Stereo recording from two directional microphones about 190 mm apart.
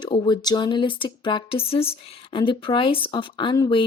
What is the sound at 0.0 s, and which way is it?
Speech, 25° left (ahead or behind).